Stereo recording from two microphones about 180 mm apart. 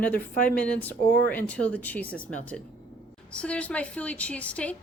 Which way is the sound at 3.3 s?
5° left (ahead or behind).